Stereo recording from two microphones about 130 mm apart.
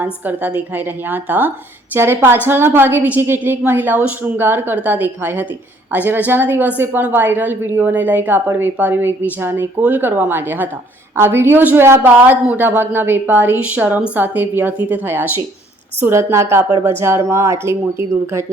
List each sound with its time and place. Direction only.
0.0 s speech: 10° right (ahead or behind)